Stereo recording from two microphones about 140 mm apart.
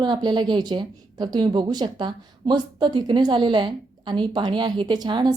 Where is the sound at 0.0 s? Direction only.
30° right (ahead or behind).